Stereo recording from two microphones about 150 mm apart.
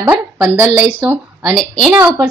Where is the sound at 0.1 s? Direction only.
15° right (ahead or behind).